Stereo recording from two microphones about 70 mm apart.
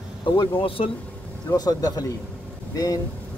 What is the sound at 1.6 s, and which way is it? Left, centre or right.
Speech, left.